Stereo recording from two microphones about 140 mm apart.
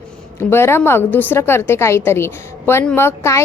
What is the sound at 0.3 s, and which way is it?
A woman's voice, 15° left (ahead or behind).